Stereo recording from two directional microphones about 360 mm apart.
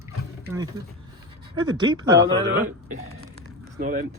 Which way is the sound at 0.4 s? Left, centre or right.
Centre.